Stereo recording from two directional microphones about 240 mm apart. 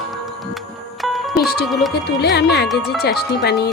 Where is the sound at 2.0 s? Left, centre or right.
Left.